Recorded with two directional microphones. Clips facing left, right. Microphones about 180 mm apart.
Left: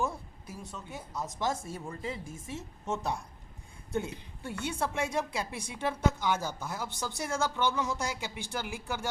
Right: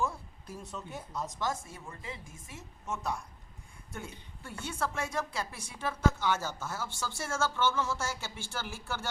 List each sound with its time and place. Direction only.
0.6 s speech: centre (ahead or behind)
1.4 s a woman's voice: 25° left (ahead or behind)
4.4 s a woman's voice: 20° left (ahead or behind)